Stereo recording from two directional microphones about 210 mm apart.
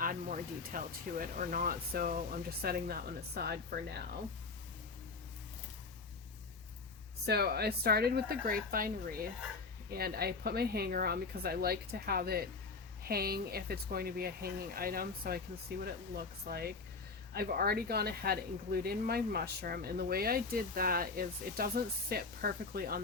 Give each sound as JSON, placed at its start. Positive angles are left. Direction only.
{"t": 0.0, "sound": "speech", "side_deg": -40}
{"t": 7.3, "sound": "speech", "side_deg": -50}